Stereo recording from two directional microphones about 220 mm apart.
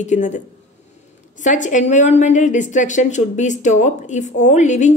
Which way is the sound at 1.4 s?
35° left (ahead or behind).